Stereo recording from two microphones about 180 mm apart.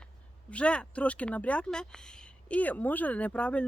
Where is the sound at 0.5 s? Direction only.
5° left (ahead or behind).